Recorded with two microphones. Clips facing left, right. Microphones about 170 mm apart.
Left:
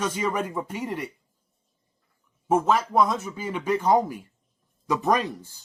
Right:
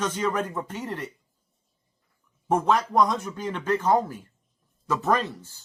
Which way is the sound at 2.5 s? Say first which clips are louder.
Left 1 dB; centre (ahead or behind).